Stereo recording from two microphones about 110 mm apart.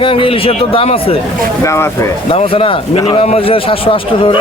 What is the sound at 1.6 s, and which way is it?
Speech, 25° left (ahead or behind).